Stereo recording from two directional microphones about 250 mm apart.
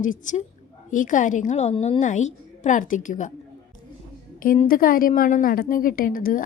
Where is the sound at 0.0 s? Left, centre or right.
Left.